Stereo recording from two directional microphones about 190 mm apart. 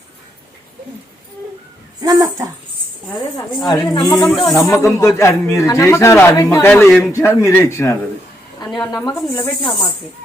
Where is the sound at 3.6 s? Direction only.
20° left (ahead or behind).